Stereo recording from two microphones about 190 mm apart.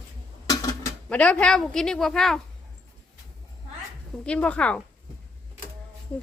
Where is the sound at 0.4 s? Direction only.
20° left (ahead or behind).